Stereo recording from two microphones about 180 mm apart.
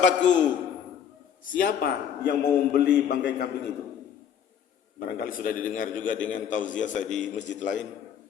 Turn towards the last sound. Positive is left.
turn(degrees=45)  # may be behind; listen again after turning